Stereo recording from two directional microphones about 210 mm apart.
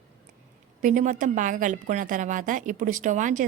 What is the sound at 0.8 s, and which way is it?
A woman's voice, 35° right (ahead or behind).